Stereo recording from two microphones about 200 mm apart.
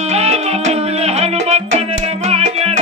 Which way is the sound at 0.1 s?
30° right (ahead or behind).